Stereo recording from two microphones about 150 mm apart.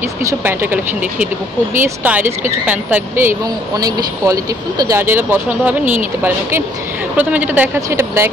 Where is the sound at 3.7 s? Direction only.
25° right (ahead or behind).